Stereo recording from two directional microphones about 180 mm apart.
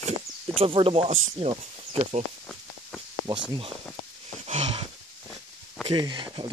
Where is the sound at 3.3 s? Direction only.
25° right (ahead or behind).